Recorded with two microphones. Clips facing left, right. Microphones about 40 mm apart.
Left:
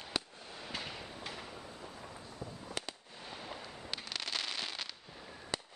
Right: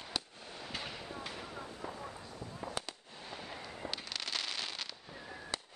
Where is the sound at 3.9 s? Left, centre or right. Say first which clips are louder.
Left 1 dB; centre.